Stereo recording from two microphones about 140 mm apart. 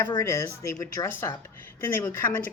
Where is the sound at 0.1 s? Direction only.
25° left (ahead or behind).